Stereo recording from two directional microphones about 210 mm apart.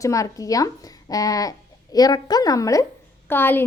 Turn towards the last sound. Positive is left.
turn(degrees=10)  # may be behind; listen again after turning